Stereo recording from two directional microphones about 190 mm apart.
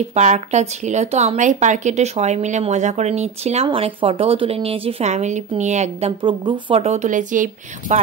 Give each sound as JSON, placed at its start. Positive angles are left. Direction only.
{"t": 0.1, "sound": "speech", "side_deg": -35}